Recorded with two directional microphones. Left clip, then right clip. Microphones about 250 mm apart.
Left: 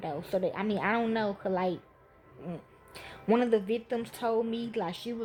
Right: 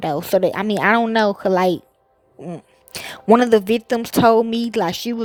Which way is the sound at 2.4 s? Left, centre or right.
Right.